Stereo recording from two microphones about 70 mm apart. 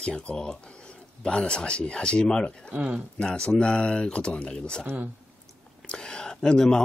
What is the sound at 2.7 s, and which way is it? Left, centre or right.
Speech, centre.